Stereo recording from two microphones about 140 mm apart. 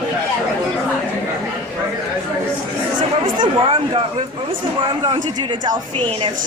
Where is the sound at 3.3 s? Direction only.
40° right (ahead or behind).